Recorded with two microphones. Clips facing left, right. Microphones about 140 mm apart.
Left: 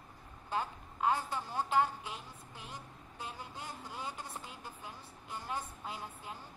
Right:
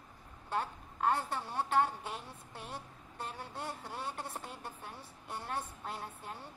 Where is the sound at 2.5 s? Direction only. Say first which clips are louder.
Right 4 dB; 55° right (ahead or behind).